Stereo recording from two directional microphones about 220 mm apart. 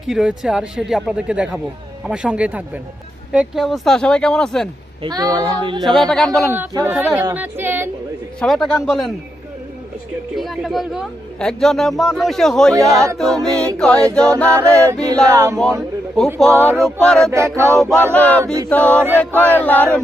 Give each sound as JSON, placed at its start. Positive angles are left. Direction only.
{"t": 0.1, "sound": "speech", "side_deg": -5}
{"t": 5.0, "sound": "speech", "side_deg": -20}
{"t": 5.8, "sound": "speech", "side_deg": 0}
{"t": 6.5, "sound": "speech", "side_deg": -10}
{"t": 8.4, "sound": "speech", "side_deg": 0}
{"t": 10.3, "sound": "speech", "side_deg": 0}
{"t": 14.5, "sound": "speech", "side_deg": -15}
{"t": 16.1, "sound": "speech", "side_deg": 0}
{"t": 16.5, "sound": "speech", "side_deg": -10}
{"t": 16.8, "sound": "speech", "side_deg": 0}
{"t": 18.1, "sound": "a sound", "side_deg": 5}